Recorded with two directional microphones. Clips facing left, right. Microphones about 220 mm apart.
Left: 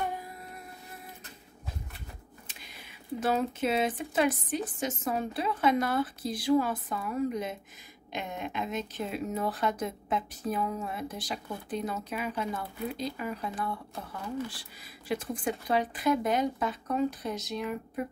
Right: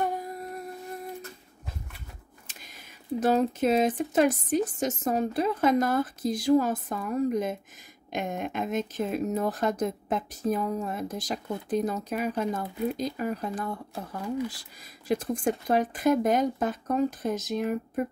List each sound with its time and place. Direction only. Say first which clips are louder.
3.2 s speech: right 5 dB; 40° right (ahead or behind)